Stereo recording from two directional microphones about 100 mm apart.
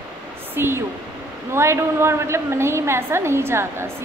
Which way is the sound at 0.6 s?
25° right (ahead or behind).